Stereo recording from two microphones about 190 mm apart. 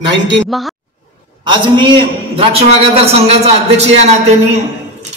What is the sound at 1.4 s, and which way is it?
A man's voice, 25° right (ahead or behind).